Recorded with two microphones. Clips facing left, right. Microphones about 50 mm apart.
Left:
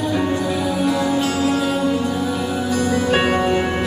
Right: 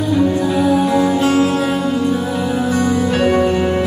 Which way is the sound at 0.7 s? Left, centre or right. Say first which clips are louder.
Right 4 dB; right.